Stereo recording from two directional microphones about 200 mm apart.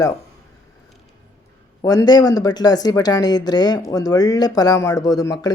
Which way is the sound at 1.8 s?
20° left (ahead or behind).